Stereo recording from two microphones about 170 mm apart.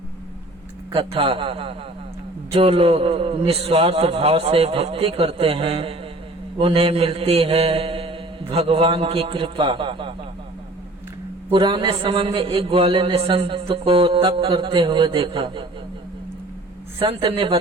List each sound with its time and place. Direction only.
0.9 s a man's voice: 30° right (ahead or behind)
11.5 s a man's voice: 25° right (ahead or behind)
17.0 s a man's voice: 30° right (ahead or behind)